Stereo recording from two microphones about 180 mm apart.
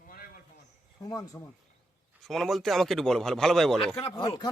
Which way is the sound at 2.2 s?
Centre (ahead or behind).